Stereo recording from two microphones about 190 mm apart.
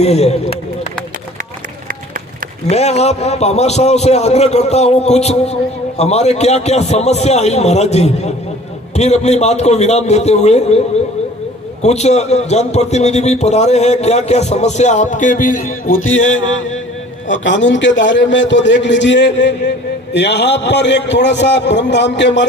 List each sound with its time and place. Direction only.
0.0 s a man's voice: 35° left (ahead or behind)
2.6 s a man's voice: 35° left (ahead or behind)
16.0 s music: 90° left
17.2 s a man's voice: 75° left (ahead or behind)